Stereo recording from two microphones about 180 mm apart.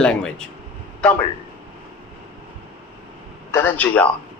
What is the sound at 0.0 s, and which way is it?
Speech, 5° left (ahead or behind).